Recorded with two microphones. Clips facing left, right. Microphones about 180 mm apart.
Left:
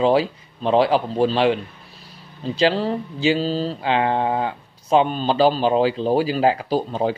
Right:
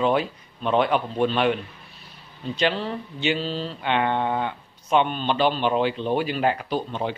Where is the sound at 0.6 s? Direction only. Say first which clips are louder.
Left 4 dB; 30° left (ahead or behind).